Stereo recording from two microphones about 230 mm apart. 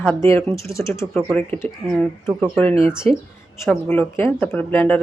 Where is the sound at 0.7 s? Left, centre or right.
Centre.